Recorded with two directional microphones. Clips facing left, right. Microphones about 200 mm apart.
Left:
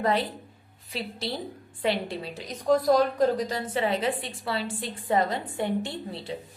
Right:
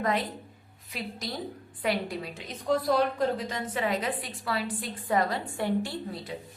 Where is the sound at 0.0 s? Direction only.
30° left (ahead or behind).